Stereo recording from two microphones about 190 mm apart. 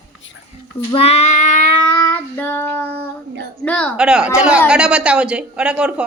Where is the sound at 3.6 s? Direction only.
5° left (ahead or behind).